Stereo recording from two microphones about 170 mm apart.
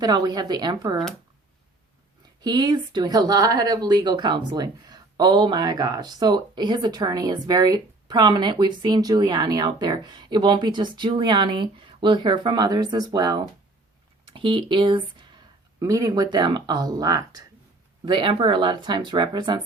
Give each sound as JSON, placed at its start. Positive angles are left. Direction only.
{"t": 0.0, "sound": "speech", "side_deg": -25}
{"t": 2.4, "sound": "speech", "side_deg": -25}